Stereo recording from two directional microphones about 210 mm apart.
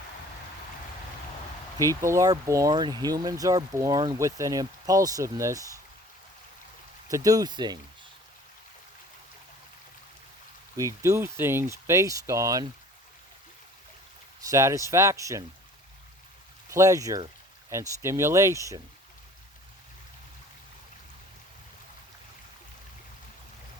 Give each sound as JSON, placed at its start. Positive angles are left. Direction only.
{"t": 1.8, "sound": "speech", "side_deg": -15}
{"t": 7.1, "sound": "speech", "side_deg": -15}
{"t": 10.8, "sound": "speech", "side_deg": -15}
{"t": 14.5, "sound": "speech", "side_deg": -15}
{"t": 16.6, "sound": "speech", "side_deg": -15}